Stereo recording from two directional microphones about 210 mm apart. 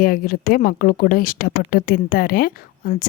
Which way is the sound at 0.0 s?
40° left (ahead or behind).